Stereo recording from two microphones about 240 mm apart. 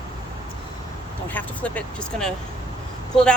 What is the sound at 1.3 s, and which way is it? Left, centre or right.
Speech, centre.